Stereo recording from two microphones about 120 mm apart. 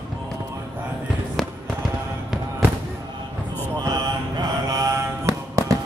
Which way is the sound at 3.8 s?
35° right (ahead or behind).